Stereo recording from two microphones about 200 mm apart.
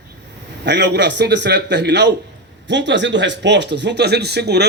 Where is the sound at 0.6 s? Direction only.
60° right (ahead or behind).